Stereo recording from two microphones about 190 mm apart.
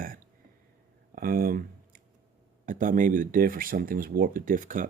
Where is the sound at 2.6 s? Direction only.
45° right (ahead or behind).